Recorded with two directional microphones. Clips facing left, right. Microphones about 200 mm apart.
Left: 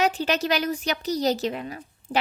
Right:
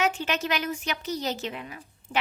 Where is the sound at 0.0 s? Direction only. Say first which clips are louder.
Left 4 dB; 35° left (ahead or behind).